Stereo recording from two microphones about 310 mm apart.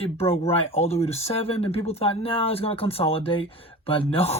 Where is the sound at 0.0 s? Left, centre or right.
Centre.